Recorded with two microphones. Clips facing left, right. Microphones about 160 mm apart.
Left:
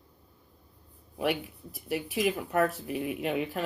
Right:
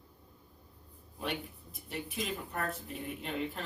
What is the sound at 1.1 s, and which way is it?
Speech, 75° left (ahead or behind).